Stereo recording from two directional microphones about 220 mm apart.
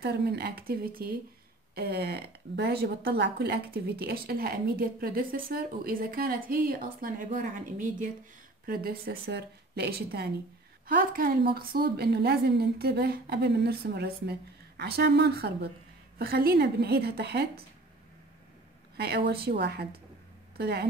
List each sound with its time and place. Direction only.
0.0 s speech: 45° right (ahead or behind)
18.9 s speech: 45° right (ahead or behind)